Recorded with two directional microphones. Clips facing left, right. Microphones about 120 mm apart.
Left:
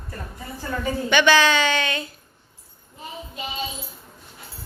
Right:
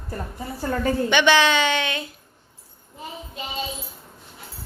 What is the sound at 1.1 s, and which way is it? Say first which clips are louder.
Speech: left 2 dB; 20° right (ahead or behind).